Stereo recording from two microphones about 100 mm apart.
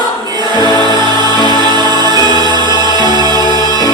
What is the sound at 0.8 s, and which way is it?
Music, 45° right (ahead or behind).